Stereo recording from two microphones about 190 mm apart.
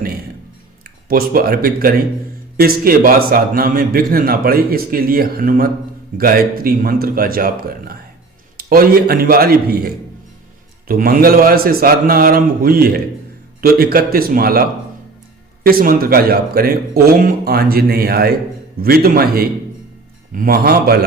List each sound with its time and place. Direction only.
0.9 s a man's voice: 50° right (ahead or behind)
15.6 s a man's voice: 50° right (ahead or behind)